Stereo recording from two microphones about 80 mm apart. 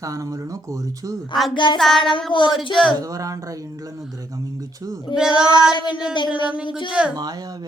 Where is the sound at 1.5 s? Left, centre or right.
Left.